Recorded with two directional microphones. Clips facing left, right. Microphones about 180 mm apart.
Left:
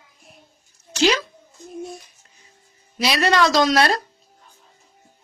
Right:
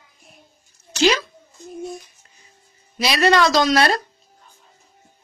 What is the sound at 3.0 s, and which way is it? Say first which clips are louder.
Speech: even; centre (ahead or behind).